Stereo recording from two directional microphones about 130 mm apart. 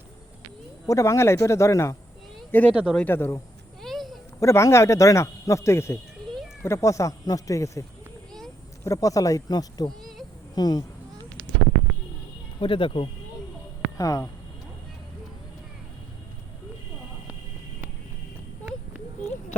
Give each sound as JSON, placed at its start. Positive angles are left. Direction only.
{"t": 0.9, "sound": "speech", "side_deg": 25}
{"t": 3.8, "sound": "a sound", "side_deg": 0}
{"t": 4.4, "sound": "speech", "side_deg": 20}
{"t": 10.0, "sound": "a sound", "side_deg": 0}
{"t": 10.5, "sound": "speech", "side_deg": 30}
{"t": 12.5, "sound": "speech", "side_deg": 40}
{"t": 14.0, "sound": "speech", "side_deg": 25}